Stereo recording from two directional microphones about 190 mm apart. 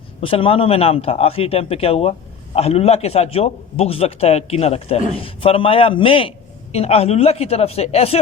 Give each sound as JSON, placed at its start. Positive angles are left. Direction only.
{"t": 0.2, "sound": "a man's voice", "side_deg": 30}